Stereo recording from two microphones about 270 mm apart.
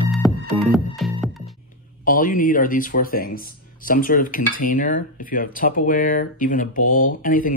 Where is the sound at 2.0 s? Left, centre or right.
Left.